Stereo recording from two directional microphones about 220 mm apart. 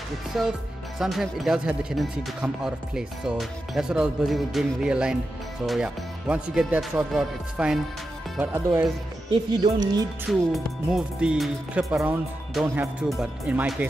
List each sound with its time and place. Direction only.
0.4 s speech: centre (ahead or behind)
9.6 s speech: 20° right (ahead or behind)
10.5 s speech: centre (ahead or behind)